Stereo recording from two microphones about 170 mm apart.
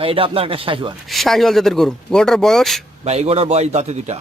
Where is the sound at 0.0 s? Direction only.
30° right (ahead or behind).